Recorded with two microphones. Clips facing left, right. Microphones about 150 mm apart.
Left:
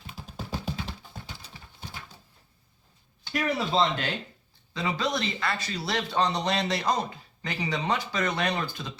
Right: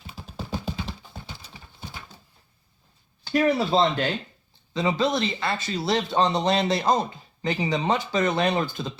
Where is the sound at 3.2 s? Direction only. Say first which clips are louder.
Right 7 dB; 35° right (ahead or behind).